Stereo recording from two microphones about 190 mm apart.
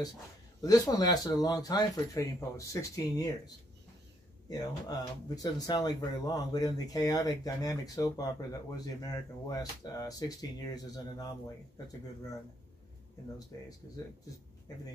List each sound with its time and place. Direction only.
0.6 s speech: 20° left (ahead or behind)
4.5 s speech: 20° left (ahead or behind)